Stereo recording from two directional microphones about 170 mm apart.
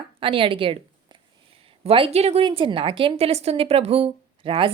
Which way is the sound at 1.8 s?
35° right (ahead or behind).